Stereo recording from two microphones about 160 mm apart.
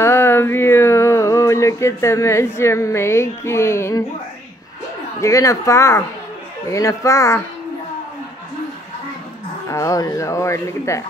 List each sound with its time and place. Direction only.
0.0 s a sound: 15° left (ahead or behind)
5.2 s speech: 20° left (ahead or behind)
9.7 s speech: 20° left (ahead or behind)